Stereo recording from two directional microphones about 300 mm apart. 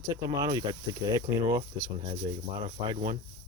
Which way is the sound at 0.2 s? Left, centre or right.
Centre.